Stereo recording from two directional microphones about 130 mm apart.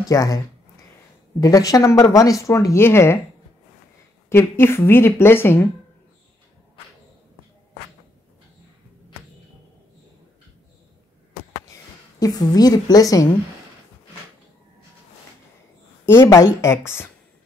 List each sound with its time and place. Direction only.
0.0 s speech: 25° left (ahead or behind)
1.4 s speech: 25° left (ahead or behind)
4.3 s a woman's voice: 15° left (ahead or behind)
11.7 s a woman's voice: 30° left (ahead or behind)
16.1 s speech: 20° left (ahead or behind)